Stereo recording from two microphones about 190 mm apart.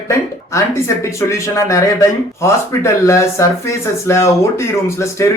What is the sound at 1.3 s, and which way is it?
Speech, 15° left (ahead or behind).